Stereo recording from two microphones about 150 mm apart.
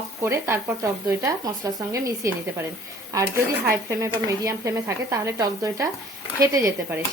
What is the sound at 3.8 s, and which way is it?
Speech, 20° right (ahead or behind).